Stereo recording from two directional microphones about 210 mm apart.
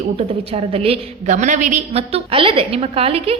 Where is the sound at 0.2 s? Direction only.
25° right (ahead or behind).